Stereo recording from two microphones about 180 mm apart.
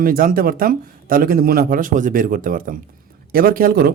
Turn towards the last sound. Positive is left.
turn(degrees=-55)  # may be behind; listen again after turning